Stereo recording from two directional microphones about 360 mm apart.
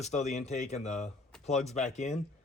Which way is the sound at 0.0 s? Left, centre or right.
Centre.